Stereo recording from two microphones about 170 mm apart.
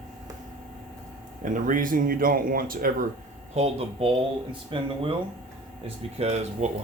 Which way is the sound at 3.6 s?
35° right (ahead or behind).